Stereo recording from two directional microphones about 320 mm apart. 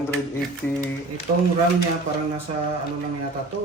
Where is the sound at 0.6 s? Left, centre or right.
Centre.